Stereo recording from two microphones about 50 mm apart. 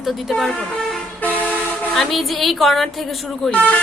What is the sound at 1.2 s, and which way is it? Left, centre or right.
Vehicle, left.